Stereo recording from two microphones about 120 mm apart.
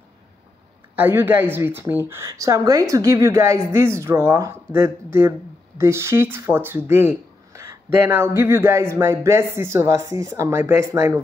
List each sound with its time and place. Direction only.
0.9 s a woman's voice: 15° right (ahead or behind)
6.9 s a sound: 20° right (ahead or behind)
7.6 s a woman's voice: 25° right (ahead or behind)